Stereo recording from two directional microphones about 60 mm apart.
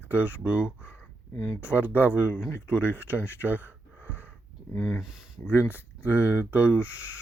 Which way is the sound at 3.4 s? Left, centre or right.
Right.